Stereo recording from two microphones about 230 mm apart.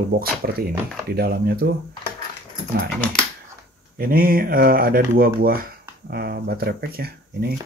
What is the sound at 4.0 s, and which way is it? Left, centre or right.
Speech, right.